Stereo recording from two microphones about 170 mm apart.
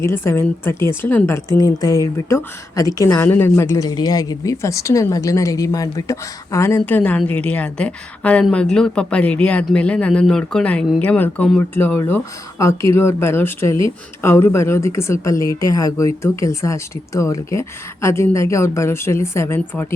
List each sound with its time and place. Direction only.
0.0 s a woman's voice: 15° left (ahead or behind)